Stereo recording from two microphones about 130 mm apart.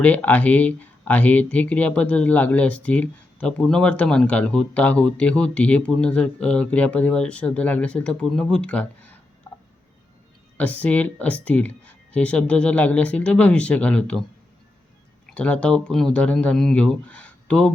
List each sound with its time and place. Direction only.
0.0 s speech: 10° left (ahead or behind)
10.6 s speech: 10° left (ahead or behind)
15.4 s speech: 10° left (ahead or behind)